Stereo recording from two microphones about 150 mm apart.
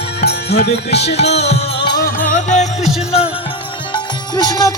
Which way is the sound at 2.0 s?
75° left (ahead or behind).